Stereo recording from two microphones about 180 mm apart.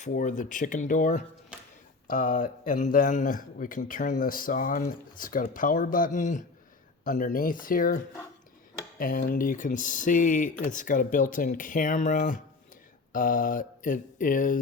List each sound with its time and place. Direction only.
0.1 s a man's voice: 45° left (ahead or behind)